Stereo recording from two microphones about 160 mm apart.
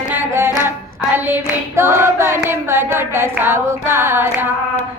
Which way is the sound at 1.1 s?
10° right (ahead or behind).